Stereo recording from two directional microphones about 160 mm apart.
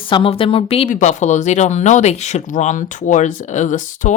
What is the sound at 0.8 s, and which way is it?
Speech, 50° left (ahead or behind).